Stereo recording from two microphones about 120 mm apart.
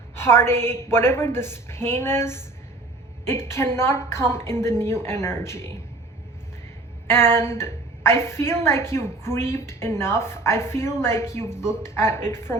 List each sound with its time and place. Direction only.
0.2 s a woman's voice: 20° left (ahead or behind)
7.1 s a woman's voice: 20° left (ahead or behind)